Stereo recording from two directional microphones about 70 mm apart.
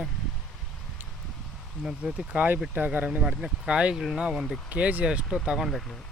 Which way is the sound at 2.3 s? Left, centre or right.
Right.